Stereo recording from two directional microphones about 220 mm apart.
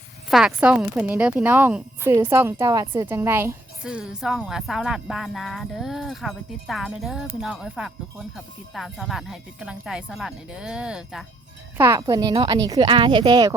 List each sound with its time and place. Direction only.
0.3 s speech: 5° right (ahead or behind)
11.8 s a woman's voice: 15° right (ahead or behind)